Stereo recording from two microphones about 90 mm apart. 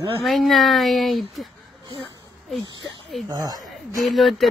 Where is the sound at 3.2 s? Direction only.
45° right (ahead or behind).